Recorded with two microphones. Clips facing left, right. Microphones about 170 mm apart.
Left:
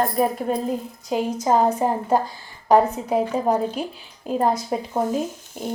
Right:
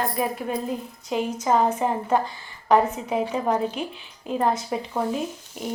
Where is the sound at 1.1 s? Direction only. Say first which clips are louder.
Left 2 dB; 35° left (ahead or behind).